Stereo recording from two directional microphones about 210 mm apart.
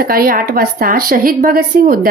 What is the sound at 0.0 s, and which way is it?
A woman's voice, 45° right (ahead or behind).